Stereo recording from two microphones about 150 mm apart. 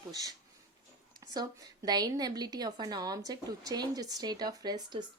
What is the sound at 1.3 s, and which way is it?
A woman's voice, 25° right (ahead or behind).